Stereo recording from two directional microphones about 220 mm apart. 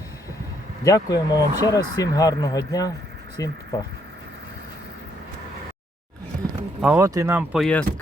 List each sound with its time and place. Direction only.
0.9 s speech: 15° left (ahead or behind)
6.8 s speech: 10° right (ahead or behind)